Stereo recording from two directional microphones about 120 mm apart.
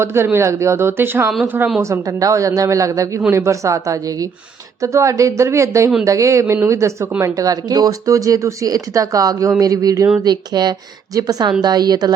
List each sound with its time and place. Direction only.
0.0 s speech: 20° right (ahead or behind)